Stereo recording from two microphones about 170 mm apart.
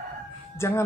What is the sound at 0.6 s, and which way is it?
Speech, 15° left (ahead or behind).